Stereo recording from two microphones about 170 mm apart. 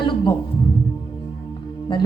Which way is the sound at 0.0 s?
30° left (ahead or behind).